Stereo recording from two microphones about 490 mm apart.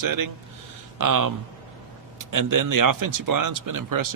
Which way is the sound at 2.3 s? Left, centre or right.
Right.